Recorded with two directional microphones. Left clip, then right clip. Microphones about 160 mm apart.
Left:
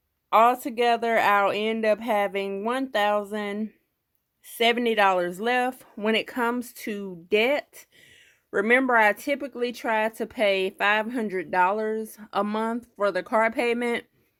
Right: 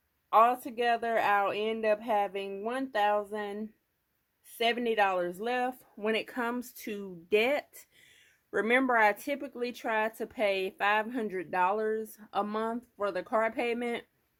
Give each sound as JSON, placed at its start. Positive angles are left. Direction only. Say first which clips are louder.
{"t": 0.3, "sound": "speech", "louder": "left 5 dB", "side_deg": 45}